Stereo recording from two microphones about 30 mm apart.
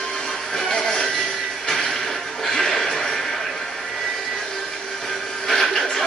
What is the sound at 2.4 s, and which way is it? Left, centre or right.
Music, centre.